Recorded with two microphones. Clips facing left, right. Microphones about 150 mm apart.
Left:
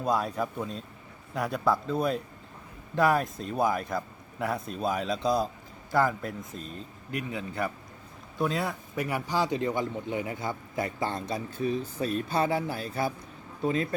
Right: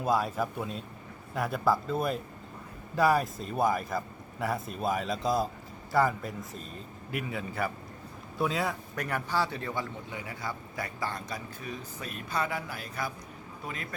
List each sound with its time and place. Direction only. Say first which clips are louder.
0.0 s a man's voice: even; centre (ahead or behind); by 13.8 s 30° left (ahead or behind)